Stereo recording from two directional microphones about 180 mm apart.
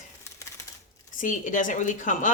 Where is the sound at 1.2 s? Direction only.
45° left (ahead or behind).